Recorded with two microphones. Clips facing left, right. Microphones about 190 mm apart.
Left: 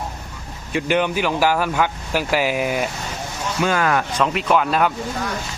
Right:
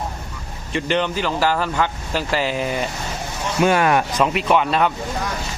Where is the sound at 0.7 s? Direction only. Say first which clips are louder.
Left 1 dB; 10° left (ahead or behind).